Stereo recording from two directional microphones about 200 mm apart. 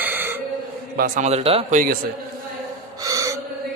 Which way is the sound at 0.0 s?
10° right (ahead or behind).